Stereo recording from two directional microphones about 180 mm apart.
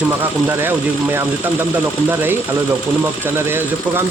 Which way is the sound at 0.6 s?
10° right (ahead or behind).